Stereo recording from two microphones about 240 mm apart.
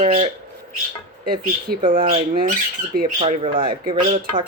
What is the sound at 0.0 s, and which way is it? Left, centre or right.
Speech, right.